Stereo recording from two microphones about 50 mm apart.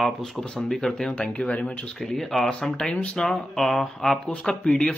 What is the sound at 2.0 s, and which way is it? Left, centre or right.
Speech, centre.